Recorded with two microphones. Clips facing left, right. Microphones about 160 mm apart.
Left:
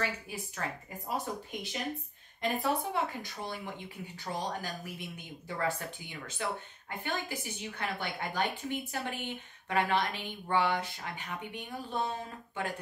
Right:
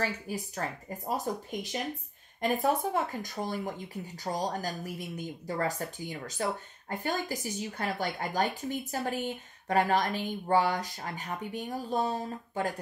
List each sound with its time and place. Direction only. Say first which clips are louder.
0.0 s a woman's voice: right 3 dB; 40° right (ahead or behind)